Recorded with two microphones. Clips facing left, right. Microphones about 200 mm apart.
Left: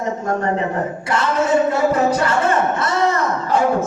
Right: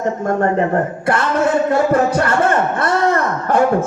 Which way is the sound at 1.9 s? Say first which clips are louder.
Right 2 dB; 55° right (ahead or behind).